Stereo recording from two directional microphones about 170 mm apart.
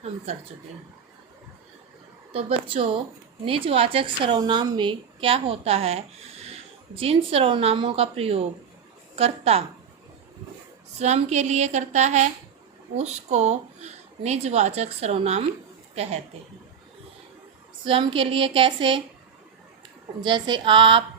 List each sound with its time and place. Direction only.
2.3 s a woman's voice: 35° right (ahead or behind)
11.0 s a woman's voice: 40° right (ahead or behind)
17.8 s a woman's voice: 30° right (ahead or behind)
20.2 s a sound: 25° right (ahead or behind)